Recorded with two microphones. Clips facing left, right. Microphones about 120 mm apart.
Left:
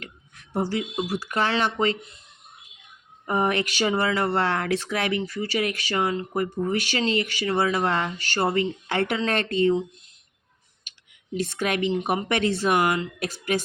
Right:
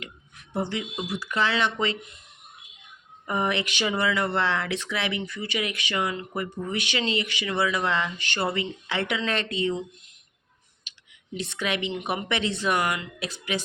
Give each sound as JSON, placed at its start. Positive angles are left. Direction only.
{"t": 0.7, "sound": "speech", "side_deg": 40}
{"t": 3.2, "sound": "speech", "side_deg": 40}
{"t": 10.9, "sound": "clicking", "side_deg": 45}
{"t": 11.3, "sound": "speech", "side_deg": 45}
{"t": 13.1, "sound": "speech", "side_deg": 45}